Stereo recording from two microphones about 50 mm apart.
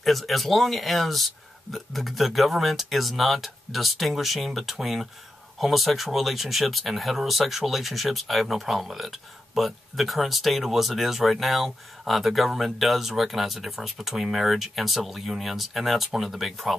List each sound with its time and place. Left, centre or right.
0.0 s speech: centre